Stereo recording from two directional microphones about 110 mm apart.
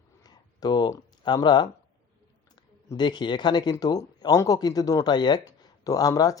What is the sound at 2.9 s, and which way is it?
Speech, 40° left (ahead or behind).